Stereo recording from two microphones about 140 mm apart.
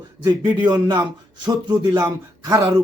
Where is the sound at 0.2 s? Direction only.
30° right (ahead or behind).